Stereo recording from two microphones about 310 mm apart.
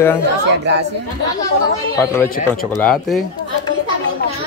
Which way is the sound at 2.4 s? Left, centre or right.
Centre.